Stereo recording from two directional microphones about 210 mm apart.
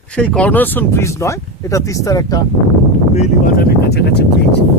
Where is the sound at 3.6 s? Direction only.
50° left (ahead or behind).